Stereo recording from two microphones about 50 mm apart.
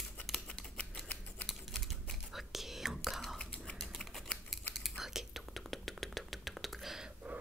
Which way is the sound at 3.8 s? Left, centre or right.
Centre.